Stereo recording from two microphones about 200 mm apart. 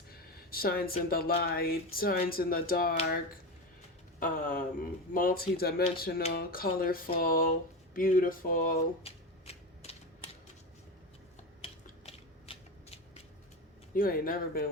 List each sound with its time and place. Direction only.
0.1 s a sound: 50° left (ahead or behind)
1.4 s speech: 50° left (ahead or behind)
4.2 s speech: 45° left (ahead or behind)
9.0 s typewriter: 30° left (ahead or behind)
11.6 s a sound: 30° left (ahead or behind)
13.9 s speech: 45° left (ahead or behind)